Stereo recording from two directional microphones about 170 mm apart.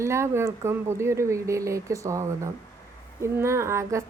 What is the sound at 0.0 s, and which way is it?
A woman's voice, 15° right (ahead or behind).